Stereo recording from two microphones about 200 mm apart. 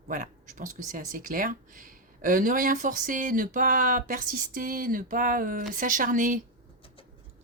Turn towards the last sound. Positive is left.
turn(degrees=-40)  # may be behind; listen again after turning